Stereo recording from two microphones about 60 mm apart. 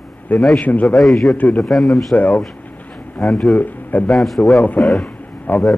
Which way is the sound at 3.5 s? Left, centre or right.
Left.